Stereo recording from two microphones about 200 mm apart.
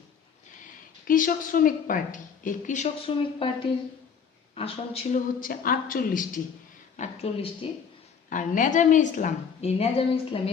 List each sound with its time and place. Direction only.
1.0 s a woman's voice: 45° left (ahead or behind)
5.4 s a woman's voice: 45° left (ahead or behind); by 10.5 s 25° left (ahead or behind)